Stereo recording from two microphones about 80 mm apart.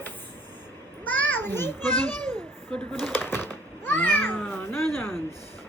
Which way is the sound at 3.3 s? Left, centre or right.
Left.